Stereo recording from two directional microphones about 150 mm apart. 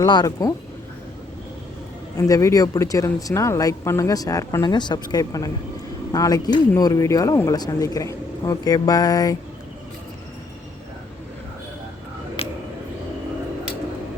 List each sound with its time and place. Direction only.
0.0 s speech: 25° left (ahead or behind)
2.1 s speech: 25° left (ahead or behind)
12.4 s a sound: 40° left (ahead or behind)